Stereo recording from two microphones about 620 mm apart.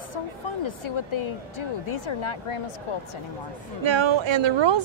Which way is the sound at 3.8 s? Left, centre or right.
Right.